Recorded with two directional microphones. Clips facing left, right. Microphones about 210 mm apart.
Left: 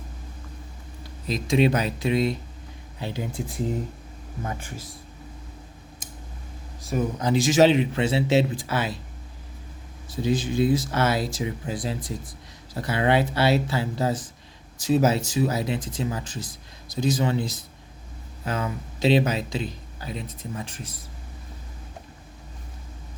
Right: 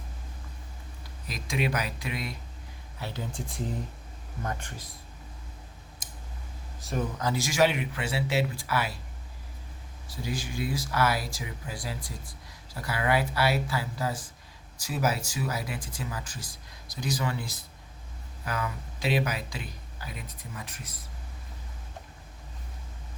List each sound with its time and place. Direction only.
1.3 s speech: 25° left (ahead or behind)
3.0 s speech: 15° left (ahead or behind)
7.2 s speech: 20° left (ahead or behind)
10.2 s speech: 20° left (ahead or behind)